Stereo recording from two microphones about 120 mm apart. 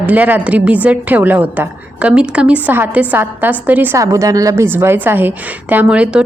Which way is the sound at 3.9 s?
25° right (ahead or behind).